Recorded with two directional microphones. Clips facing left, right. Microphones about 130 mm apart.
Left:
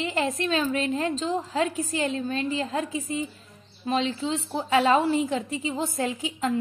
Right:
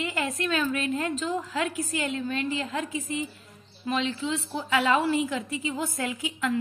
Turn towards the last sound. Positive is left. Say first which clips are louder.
# left 2 dB
turn(degrees=30)  # may be behind; listen again after turning